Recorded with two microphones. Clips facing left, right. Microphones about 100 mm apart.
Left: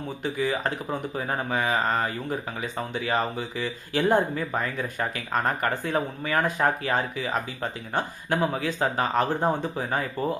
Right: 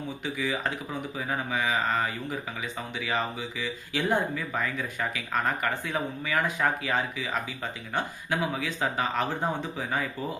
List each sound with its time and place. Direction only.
0.2 s speech: 45° left (ahead or behind)